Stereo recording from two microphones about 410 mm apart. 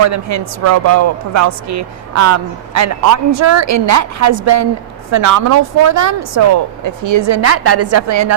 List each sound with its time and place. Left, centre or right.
0.0 s a woman's voice: right